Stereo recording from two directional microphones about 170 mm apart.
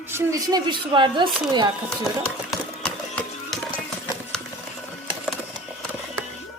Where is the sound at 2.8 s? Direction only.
5° left (ahead or behind).